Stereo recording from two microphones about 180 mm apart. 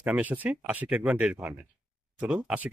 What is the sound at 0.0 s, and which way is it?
Speech, 10° right (ahead or behind).